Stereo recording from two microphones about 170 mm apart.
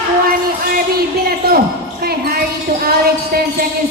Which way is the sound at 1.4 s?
65° right (ahead or behind).